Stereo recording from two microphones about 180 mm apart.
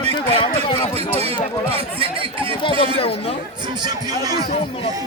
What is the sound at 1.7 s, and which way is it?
Chatter, 30° right (ahead or behind).